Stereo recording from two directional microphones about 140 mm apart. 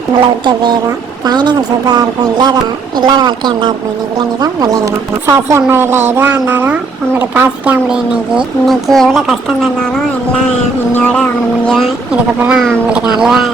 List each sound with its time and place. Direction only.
0.4 s a woman's voice: 30° right (ahead or behind); by 9.6 s centre (ahead or behind)
10.9 s music: 10° left (ahead or behind)
12.4 s a woman's voice: 5° right (ahead or behind)